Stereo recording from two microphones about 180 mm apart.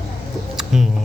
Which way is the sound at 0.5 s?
Centre (ahead or behind).